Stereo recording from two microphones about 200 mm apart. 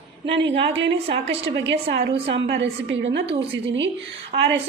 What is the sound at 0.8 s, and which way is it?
Speech, 65° right (ahead or behind).